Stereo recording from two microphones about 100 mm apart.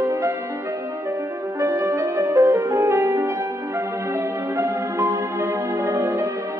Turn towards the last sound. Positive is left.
turn(degrees=-30)  # may be behind; listen again after turning